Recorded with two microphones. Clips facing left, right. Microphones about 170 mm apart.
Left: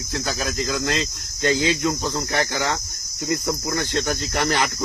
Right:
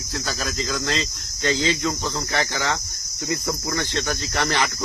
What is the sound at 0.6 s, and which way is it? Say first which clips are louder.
Cricket: left 1 dB; 15° left (ahead or behind).